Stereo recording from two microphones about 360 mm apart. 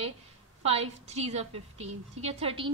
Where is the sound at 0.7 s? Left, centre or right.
Centre.